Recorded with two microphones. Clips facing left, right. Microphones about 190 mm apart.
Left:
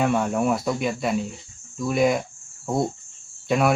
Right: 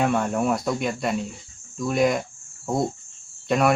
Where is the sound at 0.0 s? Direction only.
Centre (ahead or behind).